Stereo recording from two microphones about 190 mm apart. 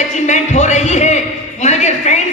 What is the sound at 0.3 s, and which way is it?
Speech, 40° left (ahead or behind).